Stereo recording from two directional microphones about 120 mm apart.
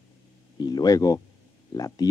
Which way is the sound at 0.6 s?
35° left (ahead or behind).